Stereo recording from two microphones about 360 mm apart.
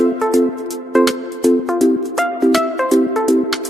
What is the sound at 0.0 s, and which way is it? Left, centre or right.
Music, centre.